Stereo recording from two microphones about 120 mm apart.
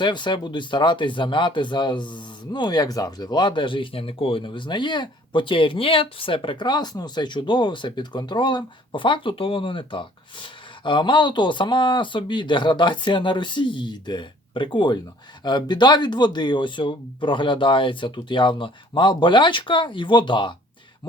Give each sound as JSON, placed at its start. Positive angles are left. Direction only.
{"t": 0.0, "sound": "speech", "side_deg": 40}